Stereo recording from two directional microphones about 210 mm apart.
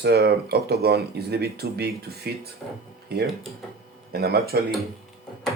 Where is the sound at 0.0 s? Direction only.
50° right (ahead or behind).